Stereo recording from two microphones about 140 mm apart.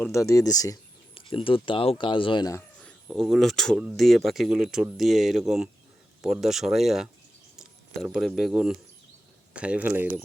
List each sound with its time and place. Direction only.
0.0 s speech: 20° left (ahead or behind)
1.1 s speech: 40° left (ahead or behind)
3.1 s speech: centre (ahead or behind)